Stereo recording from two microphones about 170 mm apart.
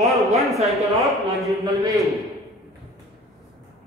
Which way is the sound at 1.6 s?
20° right (ahead or behind).